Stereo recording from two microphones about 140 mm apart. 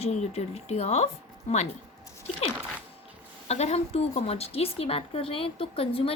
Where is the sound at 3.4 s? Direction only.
50° left (ahead or behind).